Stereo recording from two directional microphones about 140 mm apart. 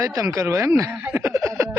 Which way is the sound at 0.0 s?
20° right (ahead or behind).